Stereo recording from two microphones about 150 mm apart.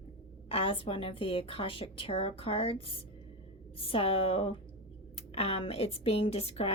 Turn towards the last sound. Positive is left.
turn(degrees=40)  # may be behind; listen again after turning